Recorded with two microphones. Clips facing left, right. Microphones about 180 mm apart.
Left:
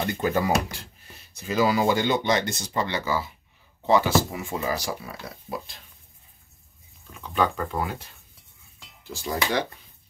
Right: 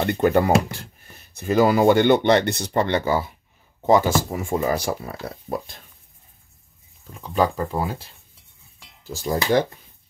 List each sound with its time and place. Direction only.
0.0 s speech: 60° right (ahead or behind)
7.2 s speech: 35° right (ahead or behind)
9.1 s speech: 40° right (ahead or behind)